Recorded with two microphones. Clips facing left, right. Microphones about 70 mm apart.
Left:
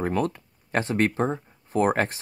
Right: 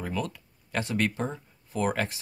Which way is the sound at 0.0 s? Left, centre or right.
Left.